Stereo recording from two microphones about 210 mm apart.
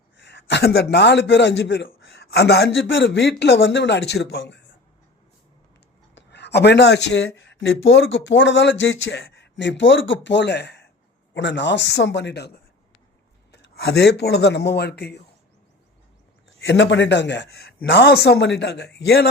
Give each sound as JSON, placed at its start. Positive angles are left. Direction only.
{"t": 0.2, "sound": "speech", "side_deg": 55}
{"t": 6.1, "sound": "speech", "side_deg": 55}
{"t": 16.6, "sound": "speech", "side_deg": 60}